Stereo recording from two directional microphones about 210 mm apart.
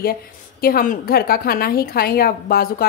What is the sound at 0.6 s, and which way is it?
A woman's voice, 45° left (ahead or behind).